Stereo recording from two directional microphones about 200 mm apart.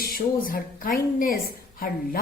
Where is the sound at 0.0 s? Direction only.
45° left (ahead or behind).